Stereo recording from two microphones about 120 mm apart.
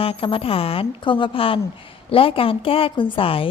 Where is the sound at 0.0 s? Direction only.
50° left (ahead or behind).